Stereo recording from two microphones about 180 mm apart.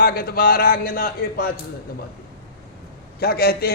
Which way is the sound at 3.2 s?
60° left (ahead or behind).